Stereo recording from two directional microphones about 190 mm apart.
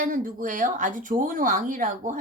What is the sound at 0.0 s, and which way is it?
A child's voice, 45° right (ahead or behind).